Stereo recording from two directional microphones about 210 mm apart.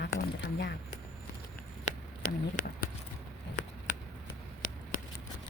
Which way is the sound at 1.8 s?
35° left (ahead or behind).